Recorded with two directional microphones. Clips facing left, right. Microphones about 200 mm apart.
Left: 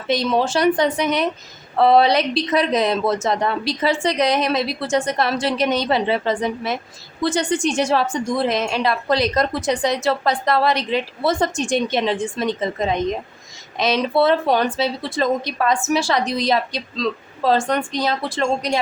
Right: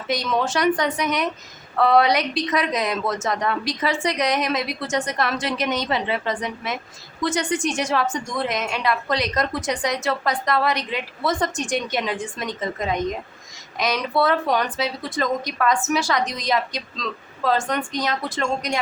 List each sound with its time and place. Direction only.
0.1 s a woman's voice: 30° left (ahead or behind)